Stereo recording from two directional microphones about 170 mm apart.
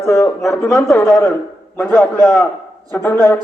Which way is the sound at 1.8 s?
15° left (ahead or behind).